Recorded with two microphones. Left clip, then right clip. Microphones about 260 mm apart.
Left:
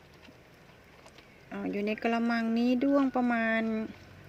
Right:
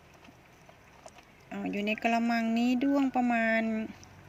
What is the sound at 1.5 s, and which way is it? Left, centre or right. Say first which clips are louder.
Speech: even; centre.